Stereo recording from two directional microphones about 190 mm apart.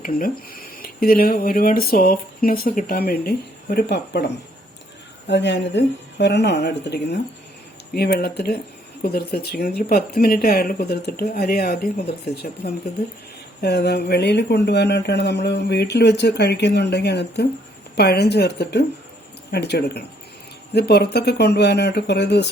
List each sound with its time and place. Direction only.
0.0 s speech: 50° left (ahead or behind)
5.3 s speech: 65° left (ahead or behind)